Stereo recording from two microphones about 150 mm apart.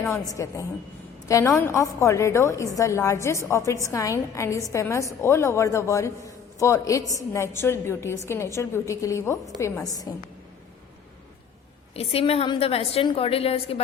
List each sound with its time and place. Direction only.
0.1 s a man's voice: 20° left (ahead or behind)
11.9 s a woman's voice: 40° left (ahead or behind)